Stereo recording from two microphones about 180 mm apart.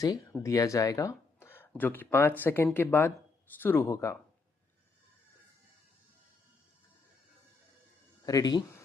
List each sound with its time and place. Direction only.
0.0 s speech: 20° left (ahead or behind)
8.2 s speech: 20° left (ahead or behind)